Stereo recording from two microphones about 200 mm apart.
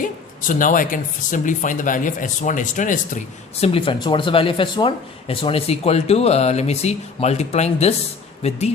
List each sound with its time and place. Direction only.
0.0 s speech: 40° left (ahead or behind)